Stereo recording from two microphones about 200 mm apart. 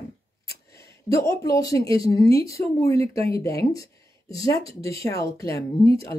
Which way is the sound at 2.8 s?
15° left (ahead or behind).